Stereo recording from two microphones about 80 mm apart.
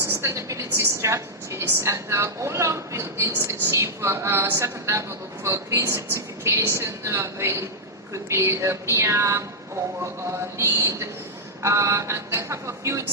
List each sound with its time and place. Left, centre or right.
0.2 s a woman's voice: right